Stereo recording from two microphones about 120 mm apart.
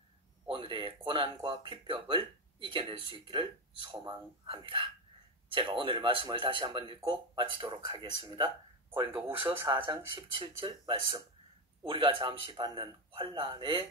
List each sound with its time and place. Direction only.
0.5 s speech: 45° right (ahead or behind)